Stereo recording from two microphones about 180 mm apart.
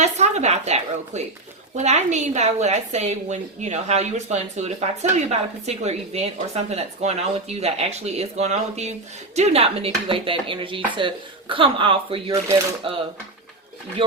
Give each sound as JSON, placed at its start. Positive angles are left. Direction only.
{"t": 0.0, "sound": "a woman's voice", "side_deg": -40}